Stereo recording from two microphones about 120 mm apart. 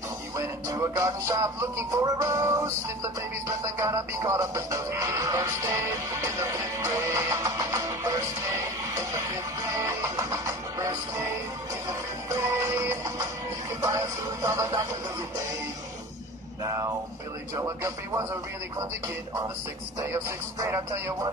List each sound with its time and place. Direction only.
0.4 s music: 25° right (ahead or behind)
10.1 s music: 30° right (ahead or behind)
12.4 s music: 25° right (ahead or behind)
17.6 s music: 25° right (ahead or behind)
20.0 s music: 25° right (ahead or behind)